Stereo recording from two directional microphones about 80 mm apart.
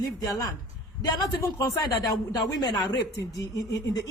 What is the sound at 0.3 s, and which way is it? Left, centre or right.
Speech, left.